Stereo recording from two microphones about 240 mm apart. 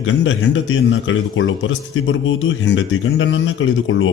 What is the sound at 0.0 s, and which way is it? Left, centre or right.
A man's voice, left.